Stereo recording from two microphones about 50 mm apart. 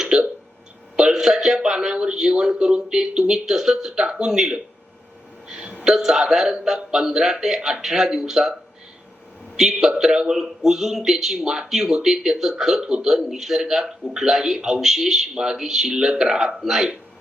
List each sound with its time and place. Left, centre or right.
0.0 s hiccup: centre
0.9 s speech: centre
9.6 s speech: centre